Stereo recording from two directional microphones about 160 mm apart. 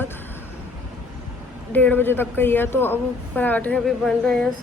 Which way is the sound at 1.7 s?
10° left (ahead or behind).